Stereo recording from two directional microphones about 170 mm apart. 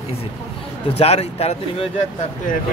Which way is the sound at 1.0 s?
35° left (ahead or behind).